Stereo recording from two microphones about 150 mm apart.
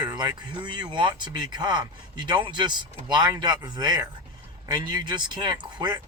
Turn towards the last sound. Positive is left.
turn(degrees=-30)  # may be behind; listen again after turning